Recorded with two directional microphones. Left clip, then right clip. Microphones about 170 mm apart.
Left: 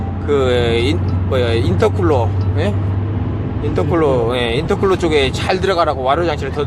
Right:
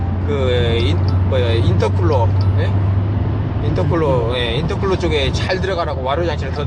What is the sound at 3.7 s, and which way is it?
Speech, 35° left (ahead or behind).